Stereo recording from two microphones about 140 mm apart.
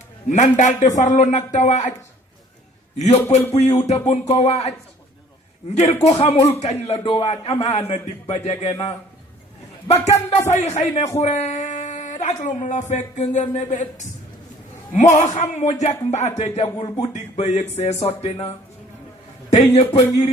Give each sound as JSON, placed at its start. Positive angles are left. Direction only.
{"t": 0.3, "sound": "speech", "side_deg": 65}
{"t": 3.0, "sound": "a man's voice", "side_deg": 55}
{"t": 5.7, "sound": "a man's voice", "side_deg": 50}
{"t": 10.5, "sound": "a man's voice", "side_deg": 55}
{"t": 19.5, "sound": "a man's voice", "side_deg": 50}